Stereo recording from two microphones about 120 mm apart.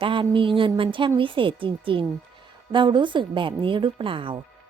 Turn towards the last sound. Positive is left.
turn(degrees=-45)  # may be behind; listen again after turning